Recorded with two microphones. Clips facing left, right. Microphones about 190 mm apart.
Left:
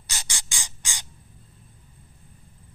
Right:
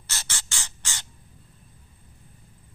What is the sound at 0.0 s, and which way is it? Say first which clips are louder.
Spray: even; 15° left (ahead or behind).